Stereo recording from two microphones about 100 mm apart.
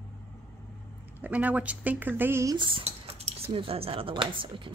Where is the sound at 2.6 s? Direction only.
75° right (ahead or behind).